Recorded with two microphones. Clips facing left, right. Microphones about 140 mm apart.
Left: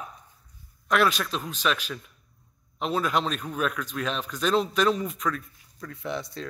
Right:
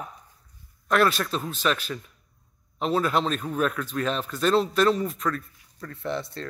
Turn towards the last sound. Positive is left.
turn(degrees=0)  # may be behind; listen again after turning